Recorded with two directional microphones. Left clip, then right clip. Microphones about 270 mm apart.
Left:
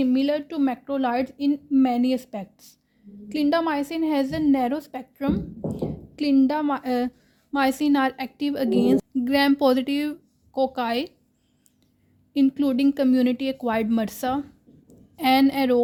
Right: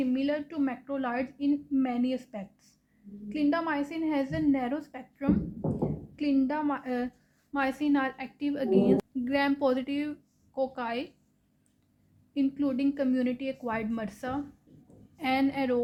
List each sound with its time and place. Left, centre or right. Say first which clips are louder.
0.0 s a woman's voice: left 7 dB; left
12.3 s a woman's voice: left 8 dB; left